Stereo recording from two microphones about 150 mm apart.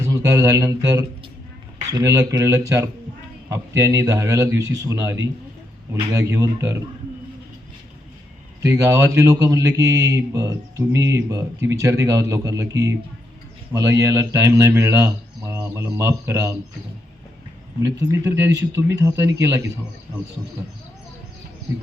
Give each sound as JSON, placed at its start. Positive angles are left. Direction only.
{"t": 0.0, "sound": "speech", "side_deg": -20}
{"t": 8.6, "sound": "speech", "side_deg": -20}
{"t": 17.8, "sound": "speech", "side_deg": -15}